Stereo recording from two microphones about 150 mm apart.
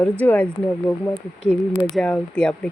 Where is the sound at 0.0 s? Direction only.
10° left (ahead or behind).